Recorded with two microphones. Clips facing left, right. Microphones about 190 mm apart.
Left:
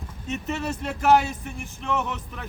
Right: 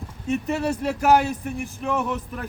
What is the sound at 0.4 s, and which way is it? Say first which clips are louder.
Speech: right 5 dB; 10° right (ahead or behind).